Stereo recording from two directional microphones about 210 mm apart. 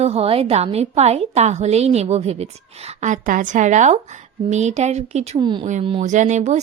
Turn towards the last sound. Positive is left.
turn(degrees=-35)  # may be behind; listen again after turning